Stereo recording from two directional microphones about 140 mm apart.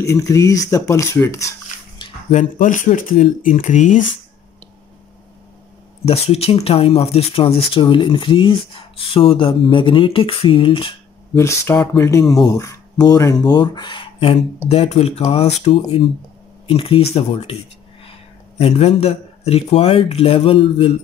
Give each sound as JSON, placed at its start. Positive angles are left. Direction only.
{"t": 0.0, "sound": "speech", "side_deg": 20}
{"t": 2.3, "sound": "speech", "side_deg": 65}
{"t": 6.0, "sound": "speech", "side_deg": 45}
{"t": 11.3, "sound": "speech", "side_deg": 20}
{"t": 14.7, "sound": "speech", "side_deg": 50}
{"t": 18.6, "sound": "speech", "side_deg": 45}